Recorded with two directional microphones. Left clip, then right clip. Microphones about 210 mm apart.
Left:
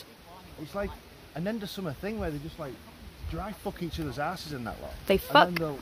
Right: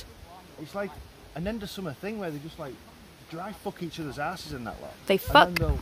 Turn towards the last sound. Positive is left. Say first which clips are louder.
# right 2 dB
turn(degrees=-5)  # may be behind; listen again after turning